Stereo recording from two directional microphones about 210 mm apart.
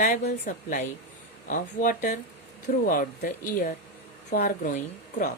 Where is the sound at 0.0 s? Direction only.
40° left (ahead or behind).